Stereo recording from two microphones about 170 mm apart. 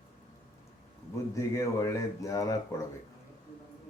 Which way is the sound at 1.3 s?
20° left (ahead or behind).